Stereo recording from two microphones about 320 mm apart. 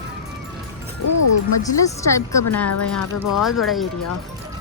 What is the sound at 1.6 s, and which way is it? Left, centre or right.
A woman's voice, centre.